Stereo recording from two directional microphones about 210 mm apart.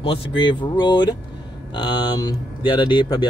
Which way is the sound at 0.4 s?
20° left (ahead or behind).